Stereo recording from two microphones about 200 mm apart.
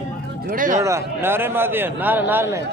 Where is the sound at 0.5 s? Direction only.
40° right (ahead or behind).